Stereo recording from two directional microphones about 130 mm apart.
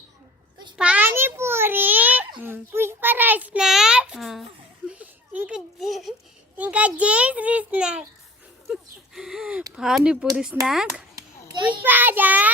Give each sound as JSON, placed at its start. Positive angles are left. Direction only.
{"t": 0.8, "sound": "a sound", "side_deg": -10}
{"t": 2.4, "sound": "a child's voice", "side_deg": -15}
{"t": 4.9, "sound": "a child's voice", "side_deg": -10}